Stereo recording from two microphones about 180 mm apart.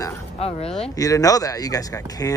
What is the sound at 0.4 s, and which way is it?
Speech, 35° left (ahead or behind).